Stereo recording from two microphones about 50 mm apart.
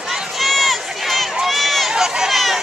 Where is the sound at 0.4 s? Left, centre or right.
Centre.